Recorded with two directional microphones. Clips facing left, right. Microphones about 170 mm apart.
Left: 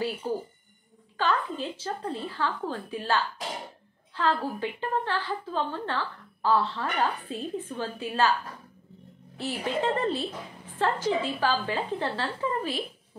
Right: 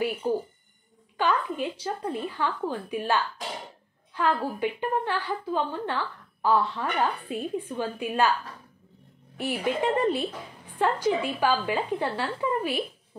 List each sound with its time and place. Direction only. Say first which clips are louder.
0.2 s a woman's voice: right 4 dB; 15° right (ahead or behind)
9.4 s a woman's voice: right 2 dB; 15° right (ahead or behind)